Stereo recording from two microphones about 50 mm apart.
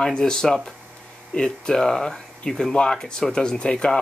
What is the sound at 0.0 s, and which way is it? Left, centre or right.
Speech, centre.